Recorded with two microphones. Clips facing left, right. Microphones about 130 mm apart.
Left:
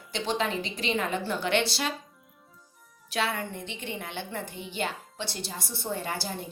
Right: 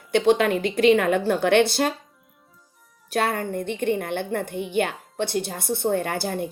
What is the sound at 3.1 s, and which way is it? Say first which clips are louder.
Speech: right 6 dB; 50° right (ahead or behind).